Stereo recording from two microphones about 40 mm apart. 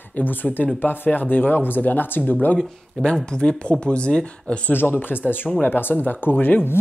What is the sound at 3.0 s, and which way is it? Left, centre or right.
Speech, left.